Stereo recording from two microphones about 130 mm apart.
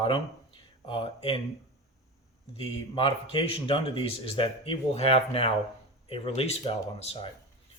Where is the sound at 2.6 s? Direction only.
40° left (ahead or behind).